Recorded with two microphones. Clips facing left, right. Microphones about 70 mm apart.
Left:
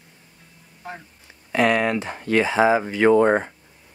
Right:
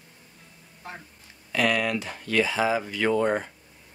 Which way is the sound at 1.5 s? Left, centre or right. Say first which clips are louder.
Left 5 dB; left.